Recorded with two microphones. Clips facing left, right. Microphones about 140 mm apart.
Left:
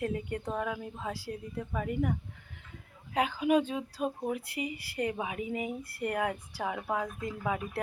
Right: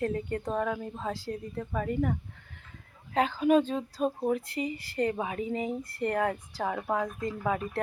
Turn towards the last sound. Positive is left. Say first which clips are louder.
# right 3 dB
turn(degrees=10)  # may be behind; listen again after turning